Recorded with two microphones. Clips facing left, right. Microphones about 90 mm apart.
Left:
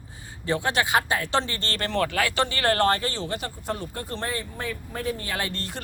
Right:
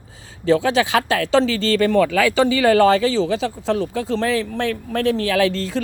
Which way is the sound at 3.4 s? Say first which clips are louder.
Right 10 dB; 90° right.